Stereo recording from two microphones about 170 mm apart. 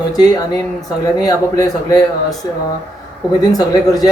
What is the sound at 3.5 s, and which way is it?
Speech, 20° left (ahead or behind).